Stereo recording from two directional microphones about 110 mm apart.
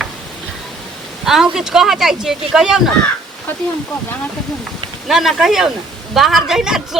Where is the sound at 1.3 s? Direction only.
5° right (ahead or behind).